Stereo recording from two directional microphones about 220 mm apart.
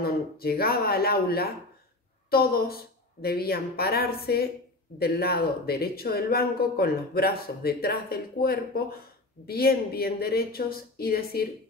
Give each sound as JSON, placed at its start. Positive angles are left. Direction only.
{"t": 0.0, "sound": "speech", "side_deg": 45}